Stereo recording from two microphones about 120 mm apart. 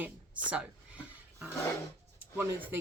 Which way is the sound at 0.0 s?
10° right (ahead or behind).